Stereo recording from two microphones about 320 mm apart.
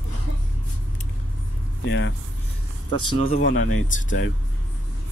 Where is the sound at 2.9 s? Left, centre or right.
Centre.